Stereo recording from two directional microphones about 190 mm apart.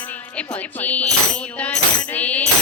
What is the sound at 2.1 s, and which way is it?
Coin, 10° left (ahead or behind).